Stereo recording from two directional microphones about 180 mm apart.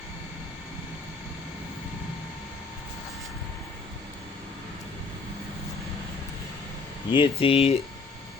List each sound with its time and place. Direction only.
7.1 s speech: 30° left (ahead or behind)